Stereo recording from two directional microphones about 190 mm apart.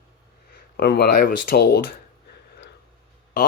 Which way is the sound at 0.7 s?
55° left (ahead or behind).